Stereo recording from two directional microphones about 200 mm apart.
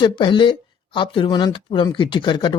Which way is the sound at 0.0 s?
25° left (ahead or behind).